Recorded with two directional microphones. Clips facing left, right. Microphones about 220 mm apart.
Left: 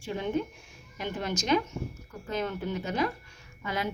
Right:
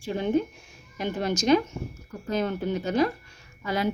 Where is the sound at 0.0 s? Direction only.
35° right (ahead or behind).